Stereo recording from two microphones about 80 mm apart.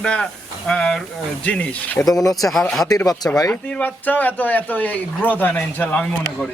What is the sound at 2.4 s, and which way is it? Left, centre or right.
Speech, centre.